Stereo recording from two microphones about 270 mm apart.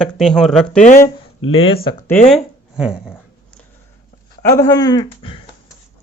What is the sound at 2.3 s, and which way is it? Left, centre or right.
Speech, centre.